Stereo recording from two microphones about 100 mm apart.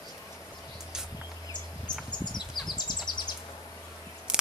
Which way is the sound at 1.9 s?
45° left (ahead or behind).